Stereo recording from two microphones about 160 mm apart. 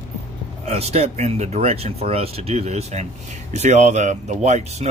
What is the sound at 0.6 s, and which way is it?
Speech, 40° right (ahead or behind).